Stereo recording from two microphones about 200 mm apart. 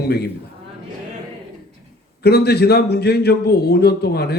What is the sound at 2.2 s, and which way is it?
A man's voice, 55° left (ahead or behind).